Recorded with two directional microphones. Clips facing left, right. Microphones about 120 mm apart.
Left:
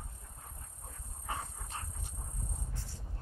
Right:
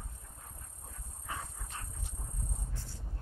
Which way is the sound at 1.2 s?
35° left (ahead or behind).